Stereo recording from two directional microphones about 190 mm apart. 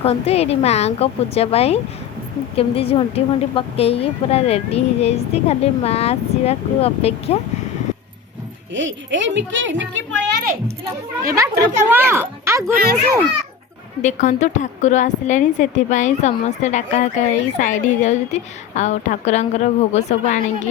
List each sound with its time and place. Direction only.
0.0 s a woman's voice: 35° left (ahead or behind)
8.7 s speech: 75° right (ahead or behind)
11.3 s speech: 15° right (ahead or behind)
14.0 s a woman's voice: 40° left (ahead or behind)